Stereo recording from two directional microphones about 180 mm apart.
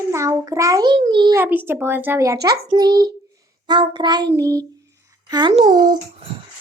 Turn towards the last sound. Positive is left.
turn(degrees=-20)  # may be behind; listen again after turning